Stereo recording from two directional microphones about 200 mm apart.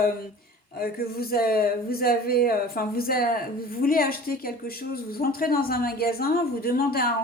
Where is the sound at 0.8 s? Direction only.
50° left (ahead or behind).